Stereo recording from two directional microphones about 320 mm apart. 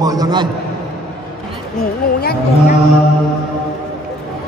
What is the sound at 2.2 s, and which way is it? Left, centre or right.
Speech, left.